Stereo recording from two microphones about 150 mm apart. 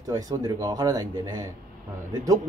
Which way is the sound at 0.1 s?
25° right (ahead or behind).